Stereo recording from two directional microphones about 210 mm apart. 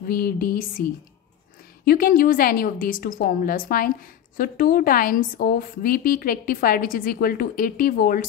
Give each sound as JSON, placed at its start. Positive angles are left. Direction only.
{"t": 0.1, "sound": "a woman's voice", "side_deg": 45}
{"t": 1.9, "sound": "a woman's voice", "side_deg": 45}